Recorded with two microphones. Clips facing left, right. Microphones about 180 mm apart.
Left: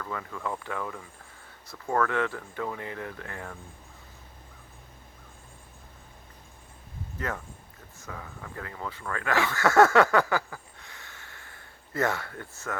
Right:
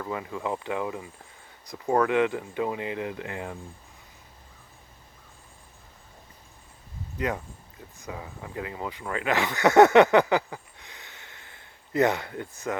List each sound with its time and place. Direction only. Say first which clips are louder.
0.0 s speech: right 3 dB; 20° right (ahead or behind)
7.2 s speech: right 5 dB; 15° right (ahead or behind)